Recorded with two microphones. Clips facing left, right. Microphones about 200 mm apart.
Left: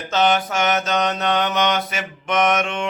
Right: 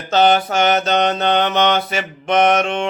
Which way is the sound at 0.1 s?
35° right (ahead or behind).